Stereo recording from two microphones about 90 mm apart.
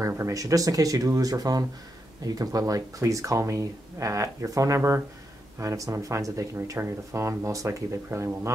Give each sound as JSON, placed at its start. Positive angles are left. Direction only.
{"t": 0.0, "sound": "speech", "side_deg": -40}